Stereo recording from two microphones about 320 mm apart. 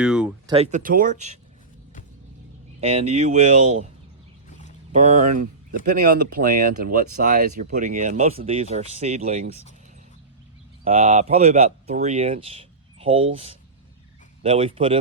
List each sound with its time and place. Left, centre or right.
0.0 s a sound: centre
0.5 s speech: right
2.8 s speech: centre
4.9 s speech: right
10.8 s speech: right